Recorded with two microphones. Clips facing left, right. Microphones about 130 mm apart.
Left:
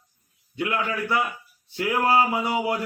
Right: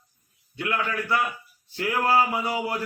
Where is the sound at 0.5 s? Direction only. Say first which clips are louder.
Left 1 dB; 20° left (ahead or behind).